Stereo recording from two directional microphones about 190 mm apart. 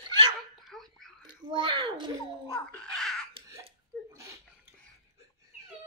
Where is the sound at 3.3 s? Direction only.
15° right (ahead or behind).